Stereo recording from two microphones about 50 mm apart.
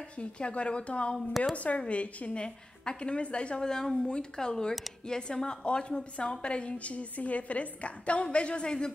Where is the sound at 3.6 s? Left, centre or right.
Centre.